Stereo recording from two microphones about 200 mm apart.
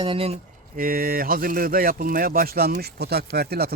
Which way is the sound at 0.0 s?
25° right (ahead or behind).